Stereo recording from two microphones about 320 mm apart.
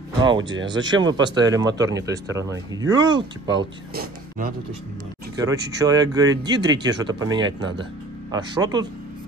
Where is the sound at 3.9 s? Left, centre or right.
Right.